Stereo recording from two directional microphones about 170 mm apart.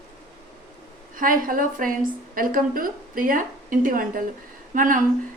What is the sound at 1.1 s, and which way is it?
A woman's voice, 55° right (ahead or behind).